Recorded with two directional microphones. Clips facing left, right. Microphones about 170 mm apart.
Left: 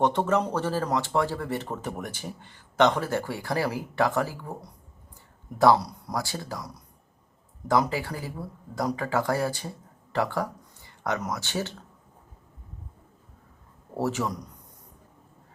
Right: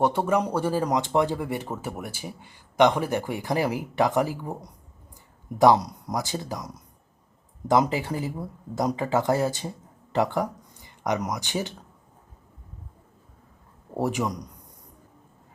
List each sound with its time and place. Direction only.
0.0 s speech: 10° right (ahead or behind)
5.5 s speech: 20° right (ahead or behind)
7.7 s speech: 20° right (ahead or behind)
13.9 s speech: 15° right (ahead or behind)